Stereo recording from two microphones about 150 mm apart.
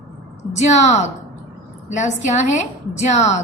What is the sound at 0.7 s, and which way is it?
Speech, 50° left (ahead or behind).